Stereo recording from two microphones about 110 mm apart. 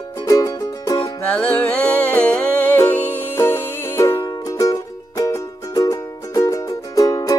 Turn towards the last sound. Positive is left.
turn(degrees=35)  # may be behind; listen again after turning